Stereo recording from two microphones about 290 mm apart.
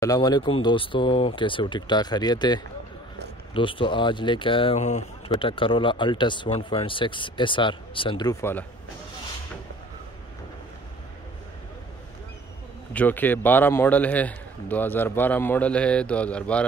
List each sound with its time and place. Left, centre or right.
0.0 s speech: centre
12.9 s a man's voice: centre